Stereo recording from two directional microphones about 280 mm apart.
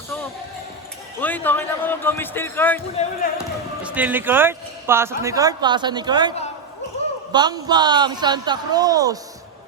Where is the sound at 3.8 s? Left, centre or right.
Centre.